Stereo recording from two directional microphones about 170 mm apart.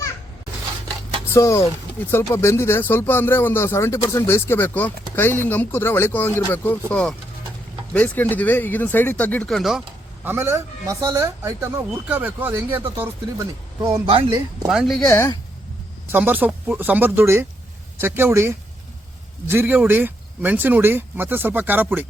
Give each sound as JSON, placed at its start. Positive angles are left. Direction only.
{"t": 1.3, "sound": "speech", "side_deg": 20}
{"t": 10.2, "sound": "speech", "side_deg": -15}
{"t": 13.8, "sound": "speech", "side_deg": -30}
{"t": 14.7, "sound": "speech", "side_deg": 0}
{"t": 16.0, "sound": "speech", "side_deg": -10}